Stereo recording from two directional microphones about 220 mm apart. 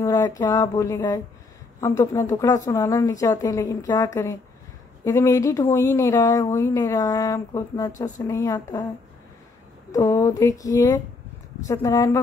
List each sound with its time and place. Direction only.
0.0 s speech: 15° left (ahead or behind)
9.9 s speech: 15° left (ahead or behind)